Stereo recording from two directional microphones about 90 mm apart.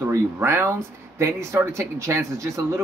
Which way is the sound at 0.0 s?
25° right (ahead or behind).